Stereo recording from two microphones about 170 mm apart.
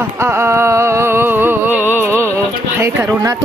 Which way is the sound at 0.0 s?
15° right (ahead or behind).